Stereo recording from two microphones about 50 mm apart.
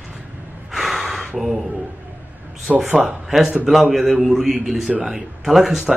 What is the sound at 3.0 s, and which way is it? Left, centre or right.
A man's voice, centre.